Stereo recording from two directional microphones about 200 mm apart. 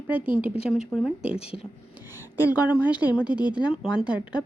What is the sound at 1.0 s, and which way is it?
Speech, 5° right (ahead or behind).